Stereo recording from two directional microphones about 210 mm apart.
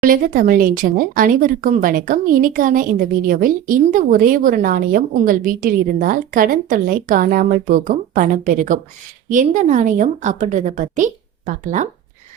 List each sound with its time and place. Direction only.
0.0 s speech: 40° right (ahead or behind)